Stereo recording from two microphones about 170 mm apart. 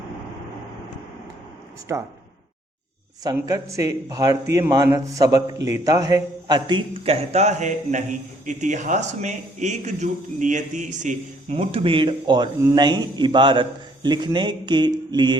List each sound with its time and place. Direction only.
1.9 s speech: 15° right (ahead or behind)
3.3 s a man's voice: 20° right (ahead or behind)